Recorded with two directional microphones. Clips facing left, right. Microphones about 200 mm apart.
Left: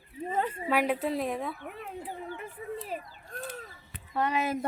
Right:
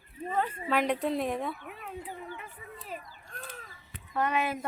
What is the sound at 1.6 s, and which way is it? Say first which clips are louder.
Speech: left 2 dB; 45° left (ahead or behind).